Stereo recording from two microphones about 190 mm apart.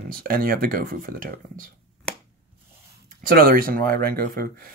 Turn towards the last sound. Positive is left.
turn(degrees=-50)  # may be behind; listen again after turning